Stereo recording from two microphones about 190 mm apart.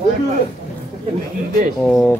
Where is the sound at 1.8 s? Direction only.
Centre (ahead or behind).